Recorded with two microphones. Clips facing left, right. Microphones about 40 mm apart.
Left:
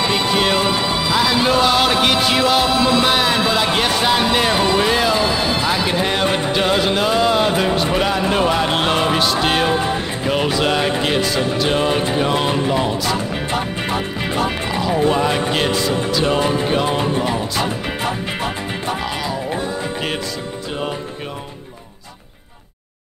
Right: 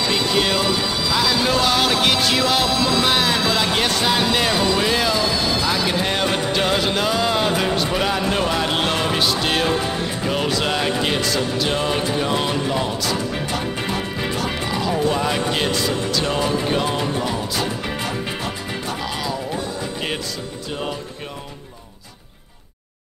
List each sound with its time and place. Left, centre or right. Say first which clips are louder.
0.0 s music: left 2 dB; left
3.1 s speech: left 2 dB; centre
4.8 s speech: left 3 dB; centre
5.1 s speech: left 3 dB; left
5.7 s speech: left 2 dB; centre
13.5 s music: left 3 dB; left
15.1 s speech: left 3 dB; centre
16.6 s music: left 3 dB; centre